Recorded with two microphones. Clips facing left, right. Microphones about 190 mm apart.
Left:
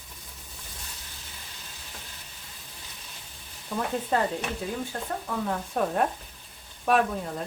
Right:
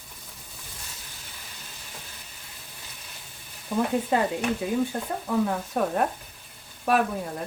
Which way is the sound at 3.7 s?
15° right (ahead or behind).